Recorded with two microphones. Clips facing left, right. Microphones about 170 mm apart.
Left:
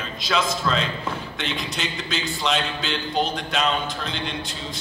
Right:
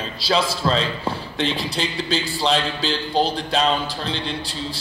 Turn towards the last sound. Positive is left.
turn(degrees=-30)  # may be behind; listen again after turning